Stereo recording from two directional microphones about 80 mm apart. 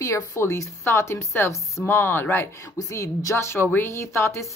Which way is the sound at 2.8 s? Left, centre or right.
Left.